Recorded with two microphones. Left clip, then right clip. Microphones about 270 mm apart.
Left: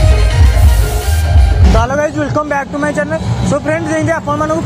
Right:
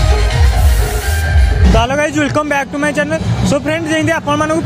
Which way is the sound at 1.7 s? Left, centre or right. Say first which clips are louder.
Even; right.